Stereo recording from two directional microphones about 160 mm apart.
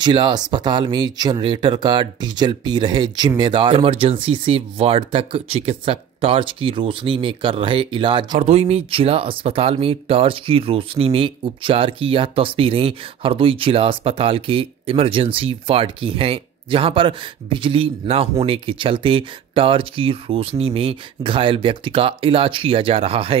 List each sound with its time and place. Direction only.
0.0 s speech: 30° right (ahead or behind)
8.3 s speech: 40° right (ahead or behind)